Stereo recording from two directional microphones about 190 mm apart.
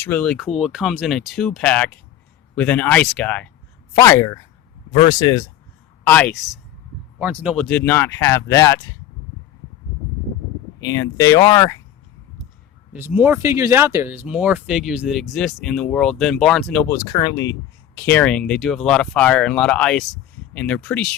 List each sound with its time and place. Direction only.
0.0 s speech: 5° left (ahead or behind); by 5.4 s 25° left (ahead or behind)
6.1 s speech: 5° left (ahead or behind); by 7.5 s 10° right (ahead or behind)
7.5 s speech: 5° left (ahead or behind)
10.8 s speech: 20° left (ahead or behind)
12.9 s speech: 10° right (ahead or behind); by 17.0 s 5° left (ahead or behind)
17.1 s speech: 20° left (ahead or behind)
18.1 s speech: 5° left (ahead or behind)